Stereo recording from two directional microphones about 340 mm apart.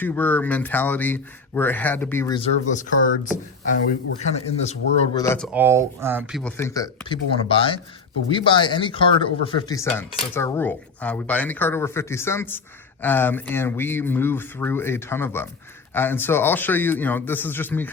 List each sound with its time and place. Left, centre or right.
0.0 s speech: centre; by 3.1 s left
4.2 s a man's voice: centre
5.2 s speech: centre
5.5 s speech: centre